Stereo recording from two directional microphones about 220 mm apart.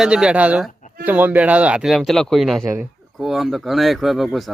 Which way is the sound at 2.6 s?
10° right (ahead or behind).